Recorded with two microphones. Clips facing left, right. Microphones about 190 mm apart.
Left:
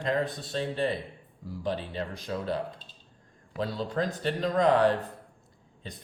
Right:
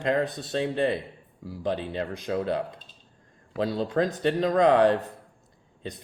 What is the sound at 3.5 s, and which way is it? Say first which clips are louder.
Speech: right 5 dB; 60° right (ahead or behind).